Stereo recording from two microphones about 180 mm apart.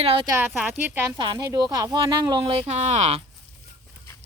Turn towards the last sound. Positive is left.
turn(degrees=-40)  # may be behind; listen again after turning